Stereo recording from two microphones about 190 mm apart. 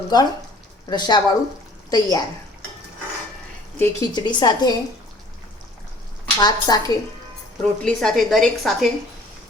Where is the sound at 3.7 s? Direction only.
15° left (ahead or behind).